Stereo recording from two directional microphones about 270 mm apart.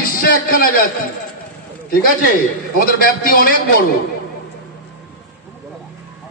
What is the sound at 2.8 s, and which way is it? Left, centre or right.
Speech, left.